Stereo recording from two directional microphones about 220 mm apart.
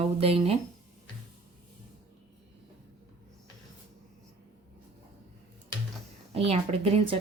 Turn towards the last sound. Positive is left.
turn(degrees=-25)  # may be behind; listen again after turning